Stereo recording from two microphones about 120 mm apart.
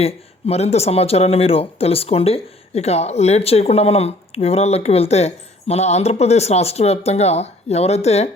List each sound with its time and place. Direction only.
0.0 s speech: 60° left (ahead or behind)